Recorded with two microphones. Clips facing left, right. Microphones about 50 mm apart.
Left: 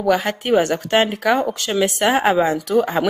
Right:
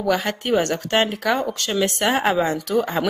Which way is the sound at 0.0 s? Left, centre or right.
Centre.